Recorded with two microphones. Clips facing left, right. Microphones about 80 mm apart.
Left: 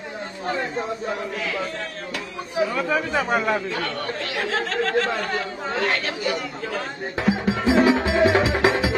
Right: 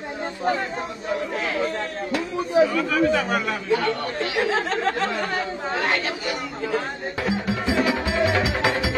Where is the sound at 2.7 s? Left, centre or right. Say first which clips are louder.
Right 2 dB; left.